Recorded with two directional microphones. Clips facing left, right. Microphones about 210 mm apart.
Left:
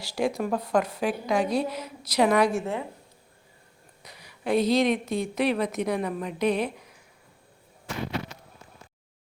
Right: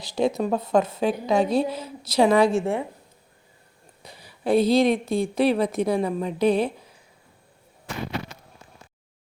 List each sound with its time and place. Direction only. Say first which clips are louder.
0.0 s a woman's voice: right 4 dB; 20° right (ahead or behind)
4.0 s a woman's voice: right 4 dB; 30° right (ahead or behind)